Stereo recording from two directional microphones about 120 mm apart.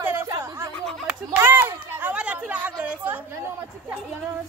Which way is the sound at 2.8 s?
15° right (ahead or behind).